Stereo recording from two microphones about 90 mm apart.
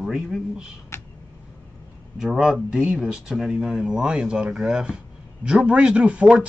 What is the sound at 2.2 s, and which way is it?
Speech, 5° right (ahead or behind).